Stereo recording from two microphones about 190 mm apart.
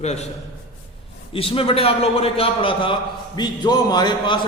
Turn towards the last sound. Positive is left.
turn(degrees=20)  # may be behind; listen again after turning